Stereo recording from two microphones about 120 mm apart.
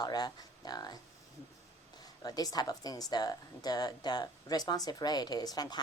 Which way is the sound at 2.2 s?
30° left (ahead or behind).